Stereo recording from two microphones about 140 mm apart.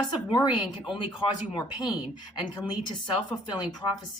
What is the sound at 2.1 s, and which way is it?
Speech, 30° left (ahead or behind).